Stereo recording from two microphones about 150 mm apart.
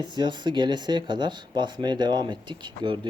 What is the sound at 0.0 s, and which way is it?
Speech, 30° right (ahead or behind).